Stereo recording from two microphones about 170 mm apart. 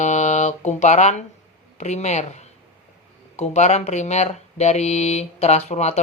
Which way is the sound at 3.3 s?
40° left (ahead or behind).